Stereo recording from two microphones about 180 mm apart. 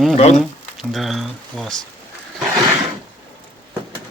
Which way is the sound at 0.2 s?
35° left (ahead or behind).